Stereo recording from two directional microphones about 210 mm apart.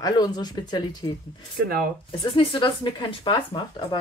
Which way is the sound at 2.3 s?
20° left (ahead or behind).